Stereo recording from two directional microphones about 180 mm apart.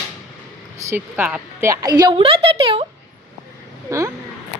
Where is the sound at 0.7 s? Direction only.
15° right (ahead or behind); by 2.9 s 30° right (ahead or behind).